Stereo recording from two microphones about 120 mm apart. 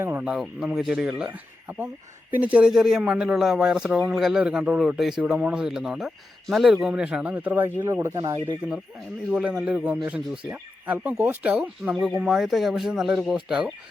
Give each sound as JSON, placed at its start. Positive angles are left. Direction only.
{"t": 0.0, "sound": "a sound", "side_deg": -20}
{"t": 0.3, "sound": "speech", "side_deg": -5}
{"t": 9.3, "sound": "speech", "side_deg": -10}